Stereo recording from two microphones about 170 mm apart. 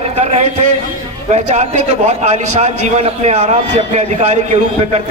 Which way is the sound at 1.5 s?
45° right (ahead or behind).